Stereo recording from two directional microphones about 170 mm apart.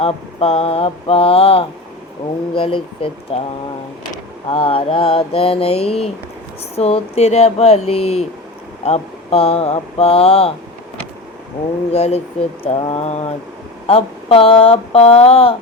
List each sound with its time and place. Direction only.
0.0 s speech: 35° left (ahead or behind)
4.4 s speech: 30° left (ahead or behind)
11.9 s speech: 40° left (ahead or behind)